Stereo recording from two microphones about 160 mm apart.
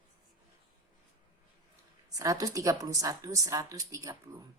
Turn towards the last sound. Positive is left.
turn(degrees=-20)  # may be behind; listen again after turning